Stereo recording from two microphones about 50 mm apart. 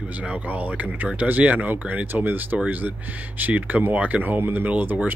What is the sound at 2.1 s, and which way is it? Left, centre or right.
Speech, right.